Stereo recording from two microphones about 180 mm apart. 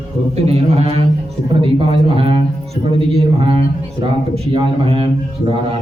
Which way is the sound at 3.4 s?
30° right (ahead or behind).